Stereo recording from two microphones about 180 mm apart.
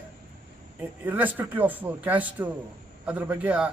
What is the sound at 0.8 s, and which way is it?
A man's voice, 10° right (ahead or behind).